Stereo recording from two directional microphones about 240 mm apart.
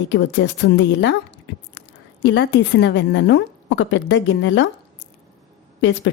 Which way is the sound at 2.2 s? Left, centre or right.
Left.